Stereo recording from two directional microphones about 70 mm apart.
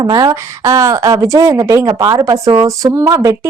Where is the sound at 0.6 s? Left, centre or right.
Right.